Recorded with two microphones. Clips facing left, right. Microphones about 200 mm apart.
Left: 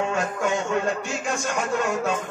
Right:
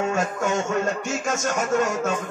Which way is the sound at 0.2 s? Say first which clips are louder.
Right 1 dB; 45° right (ahead or behind).